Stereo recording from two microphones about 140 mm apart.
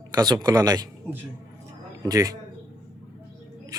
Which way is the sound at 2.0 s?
25° right (ahead or behind).